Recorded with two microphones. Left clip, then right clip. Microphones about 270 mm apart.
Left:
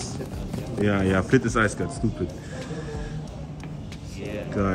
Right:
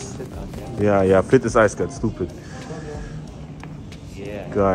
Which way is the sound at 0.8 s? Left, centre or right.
Centre.